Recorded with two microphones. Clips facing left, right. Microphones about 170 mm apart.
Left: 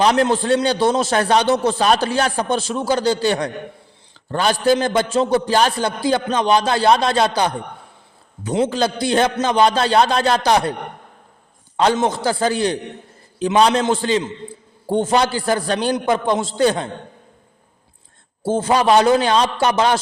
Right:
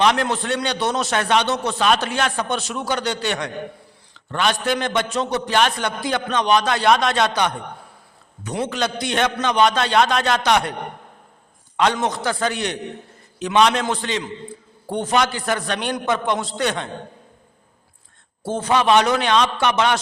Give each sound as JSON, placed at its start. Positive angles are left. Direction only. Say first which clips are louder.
{"t": 0.0, "sound": "a man's voice", "louder": "left 3 dB", "side_deg": 30}
{"t": 11.8, "sound": "a man's voice", "louder": "left 3 dB", "side_deg": 30}
{"t": 18.4, "sound": "a man's voice", "louder": "left 3 dB", "side_deg": 30}